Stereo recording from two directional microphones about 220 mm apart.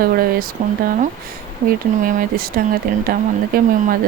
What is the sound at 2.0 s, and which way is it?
Speech, 40° right (ahead or behind).